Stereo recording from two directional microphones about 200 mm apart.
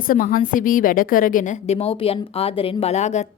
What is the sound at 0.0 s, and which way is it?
A woman's voice, 45° left (ahead or behind).